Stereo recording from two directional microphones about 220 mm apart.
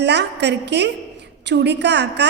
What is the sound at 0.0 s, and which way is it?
A woman's voice, 50° right (ahead or behind).